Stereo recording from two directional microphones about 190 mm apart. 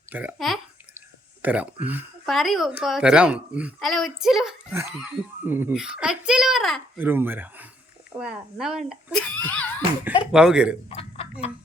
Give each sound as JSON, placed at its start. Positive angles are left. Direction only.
{"t": 0.1, "sound": "a child's voice", "side_deg": -10}
{"t": 4.7, "sound": "a child's voice", "side_deg": -15}
{"t": 7.0, "sound": "a child's voice", "side_deg": -10}
{"t": 10.3, "sound": "a child's voice", "side_deg": -5}
{"t": 10.8, "sound": "speech", "side_deg": 30}